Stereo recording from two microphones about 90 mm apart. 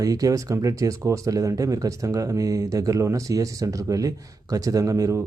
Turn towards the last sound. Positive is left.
turn(degrees=-40)  # may be behind; listen again after turning